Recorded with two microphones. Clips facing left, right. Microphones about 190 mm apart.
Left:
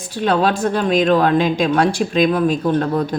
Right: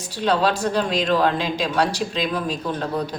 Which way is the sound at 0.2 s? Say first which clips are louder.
Left 3 dB; 50° left (ahead or behind).